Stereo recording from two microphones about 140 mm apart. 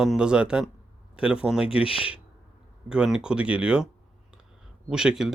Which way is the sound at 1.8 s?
40° left (ahead or behind).